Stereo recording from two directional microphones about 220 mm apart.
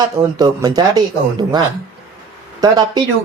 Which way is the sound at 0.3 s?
15° right (ahead or behind).